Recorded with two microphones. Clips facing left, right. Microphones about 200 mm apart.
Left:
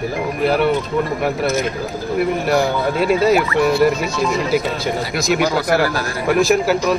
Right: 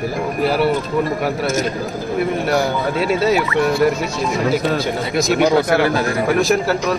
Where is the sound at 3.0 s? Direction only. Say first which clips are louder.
Left 3 dB; centre (ahead or behind).